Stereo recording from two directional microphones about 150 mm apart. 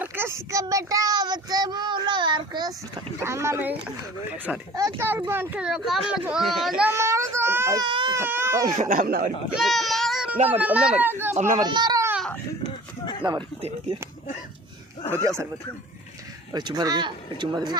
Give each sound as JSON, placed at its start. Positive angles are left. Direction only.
{"t": 0.0, "sound": "speech", "side_deg": -15}
{"t": 4.9, "sound": "a child's voice", "side_deg": -15}
{"t": 6.9, "sound": "baby cry", "side_deg": -20}
{"t": 7.9, "sound": "speech", "side_deg": -35}
{"t": 8.1, "sound": "a child's voice", "side_deg": -15}
{"t": 8.7, "sound": "speech", "side_deg": -60}
{"t": 9.6, "sound": "a sound", "side_deg": 0}
{"t": 10.6, "sound": "a child's voice", "side_deg": -10}
{"t": 11.3, "sound": "speech", "side_deg": -55}
{"t": 11.6, "sound": "speech", "side_deg": -30}
{"t": 13.2, "sound": "speech", "side_deg": -30}
{"t": 16.5, "sound": "speech", "side_deg": -30}